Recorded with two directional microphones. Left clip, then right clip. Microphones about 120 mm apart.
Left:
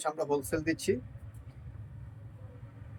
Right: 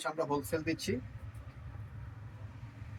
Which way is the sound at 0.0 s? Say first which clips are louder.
Left 3 dB; 40° left (ahead or behind).